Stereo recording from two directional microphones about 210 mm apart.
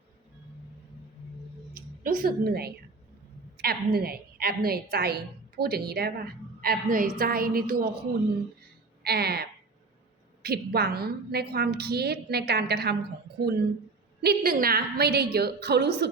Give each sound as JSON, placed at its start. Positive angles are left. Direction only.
{"t": 1.7, "sound": "a woman's voice", "side_deg": -45}
{"t": 9.0, "sound": "a woman's voice", "side_deg": -50}